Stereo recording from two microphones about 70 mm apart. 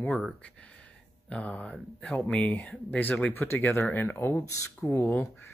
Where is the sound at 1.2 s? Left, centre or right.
Centre.